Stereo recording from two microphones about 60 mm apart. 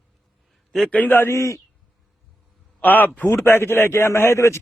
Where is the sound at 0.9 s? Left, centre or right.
Left.